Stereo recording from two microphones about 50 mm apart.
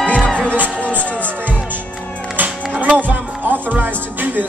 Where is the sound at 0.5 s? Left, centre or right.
Right.